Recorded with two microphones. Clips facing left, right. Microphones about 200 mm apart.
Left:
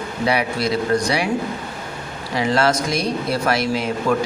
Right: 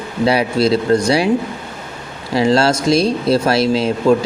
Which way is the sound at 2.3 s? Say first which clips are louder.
Right 5 dB; 30° right (ahead or behind).